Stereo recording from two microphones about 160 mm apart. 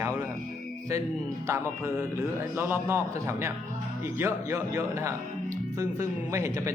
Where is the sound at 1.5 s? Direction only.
15° right (ahead or behind).